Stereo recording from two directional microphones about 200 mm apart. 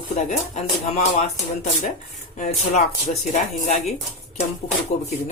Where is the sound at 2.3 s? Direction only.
35° left (ahead or behind).